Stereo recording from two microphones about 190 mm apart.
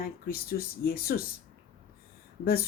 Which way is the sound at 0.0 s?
50° left (ahead or behind).